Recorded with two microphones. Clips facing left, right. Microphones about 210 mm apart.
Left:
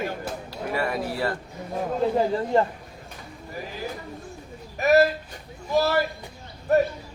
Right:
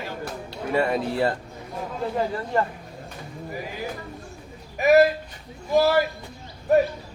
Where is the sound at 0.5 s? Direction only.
25° right (ahead or behind).